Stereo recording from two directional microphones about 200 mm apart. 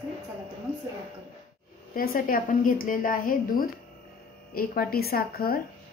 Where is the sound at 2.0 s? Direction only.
45° left (ahead or behind).